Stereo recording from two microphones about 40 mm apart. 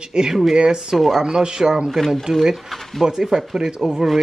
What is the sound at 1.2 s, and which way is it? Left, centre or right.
Speech, centre.